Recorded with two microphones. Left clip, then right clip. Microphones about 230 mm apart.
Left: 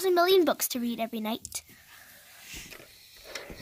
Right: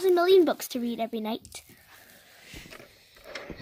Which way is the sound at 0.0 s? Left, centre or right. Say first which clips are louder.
Right 2 dB; left.